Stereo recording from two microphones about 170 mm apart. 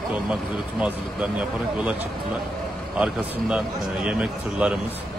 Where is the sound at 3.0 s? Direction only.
5° right (ahead or behind).